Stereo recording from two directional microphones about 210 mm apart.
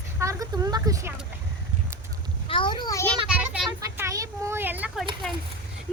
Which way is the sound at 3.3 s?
5° right (ahead or behind).